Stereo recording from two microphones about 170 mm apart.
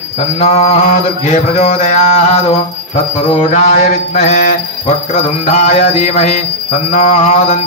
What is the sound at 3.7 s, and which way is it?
Jingle bell, 50° left (ahead or behind).